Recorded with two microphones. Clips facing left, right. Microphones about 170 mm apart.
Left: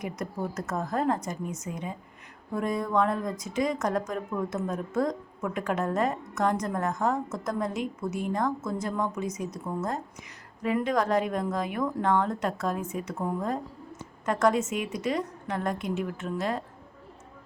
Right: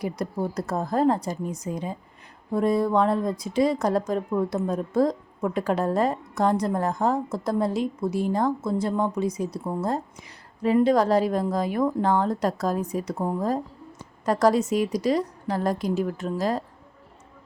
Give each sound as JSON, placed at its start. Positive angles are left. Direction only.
{"t": 0.0, "sound": "speech", "side_deg": -35}